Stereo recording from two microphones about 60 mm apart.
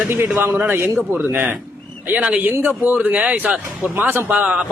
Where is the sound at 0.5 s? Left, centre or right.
Right.